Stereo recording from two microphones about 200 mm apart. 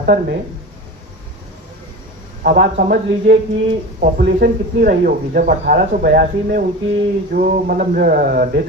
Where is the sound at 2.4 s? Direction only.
45° right (ahead or behind).